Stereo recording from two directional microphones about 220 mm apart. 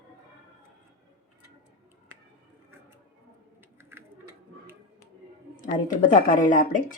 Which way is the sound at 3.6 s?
10° right (ahead or behind).